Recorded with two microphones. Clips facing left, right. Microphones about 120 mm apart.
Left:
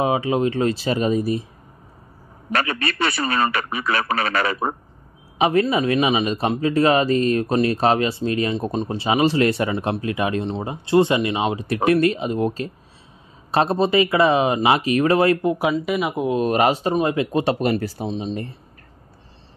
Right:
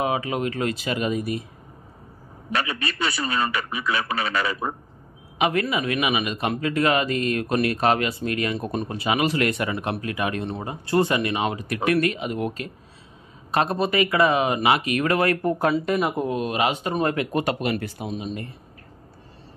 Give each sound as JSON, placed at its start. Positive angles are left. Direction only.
{"t": 0.0, "sound": "speech", "side_deg": 30}
{"t": 2.5, "sound": "a man's voice", "side_deg": 55}
{"t": 5.4, "sound": "speech", "side_deg": 30}
{"t": 15.6, "sound": "speech", "side_deg": 5}
{"t": 16.3, "sound": "speech", "side_deg": 40}
{"t": 17.6, "sound": "speech", "side_deg": 35}